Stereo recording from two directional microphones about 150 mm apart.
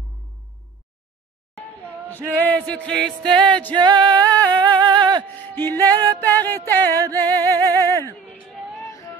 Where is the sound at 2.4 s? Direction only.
10° left (ahead or behind).